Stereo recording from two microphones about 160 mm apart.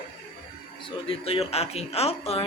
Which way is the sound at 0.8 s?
35° left (ahead or behind).